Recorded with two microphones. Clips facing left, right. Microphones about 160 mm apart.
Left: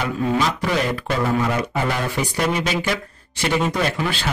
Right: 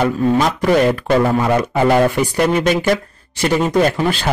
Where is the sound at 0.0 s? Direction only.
50° right (ahead or behind).